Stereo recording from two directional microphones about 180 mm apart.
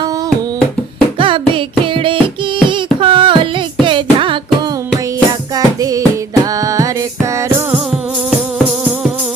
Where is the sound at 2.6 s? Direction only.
30° right (ahead or behind).